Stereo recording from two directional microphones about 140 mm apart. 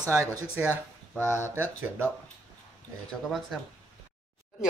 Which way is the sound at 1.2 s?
15° left (ahead or behind).